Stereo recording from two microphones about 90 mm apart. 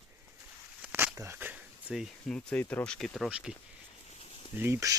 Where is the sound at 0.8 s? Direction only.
20° right (ahead or behind).